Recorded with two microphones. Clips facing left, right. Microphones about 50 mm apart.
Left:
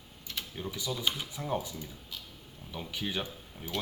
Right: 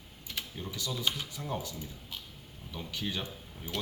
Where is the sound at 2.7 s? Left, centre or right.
Centre.